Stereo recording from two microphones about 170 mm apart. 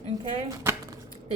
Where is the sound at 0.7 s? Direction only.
15° right (ahead or behind).